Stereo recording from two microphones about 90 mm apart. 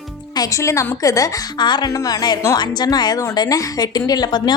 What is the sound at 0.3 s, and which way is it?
Speech, 35° left (ahead or behind).